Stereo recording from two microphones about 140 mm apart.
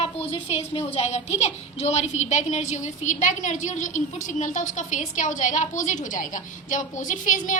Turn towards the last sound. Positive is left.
turn(degrees=70)  # may be behind; listen again after turning